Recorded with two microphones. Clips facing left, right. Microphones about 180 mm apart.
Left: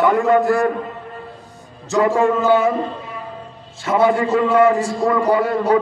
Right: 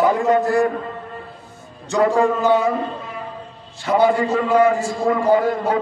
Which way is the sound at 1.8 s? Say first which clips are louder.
Left 1 dB; centre (ahead or behind).